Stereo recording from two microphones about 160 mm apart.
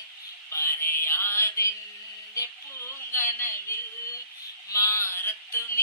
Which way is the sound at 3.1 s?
15° left (ahead or behind).